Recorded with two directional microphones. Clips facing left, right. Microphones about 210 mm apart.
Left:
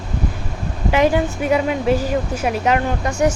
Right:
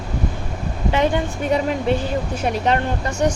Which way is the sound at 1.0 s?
5° left (ahead or behind).